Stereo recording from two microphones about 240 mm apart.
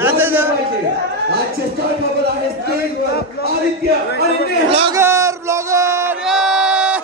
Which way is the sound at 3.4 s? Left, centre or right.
Left.